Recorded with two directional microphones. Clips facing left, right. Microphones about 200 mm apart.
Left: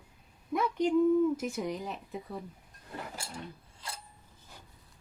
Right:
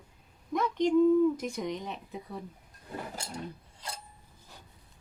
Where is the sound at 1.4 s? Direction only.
5° left (ahead or behind).